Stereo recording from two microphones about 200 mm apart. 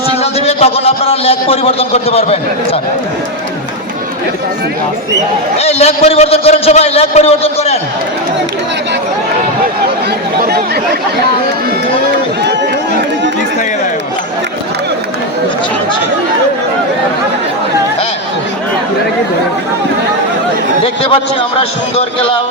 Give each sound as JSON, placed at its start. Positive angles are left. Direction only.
{"t": 0.2, "sound": "a man's voice", "side_deg": 30}
{"t": 5.5, "sound": "a man's voice", "side_deg": 30}